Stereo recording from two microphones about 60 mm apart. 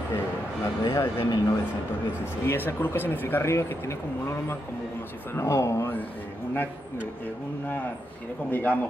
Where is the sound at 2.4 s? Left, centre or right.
Left.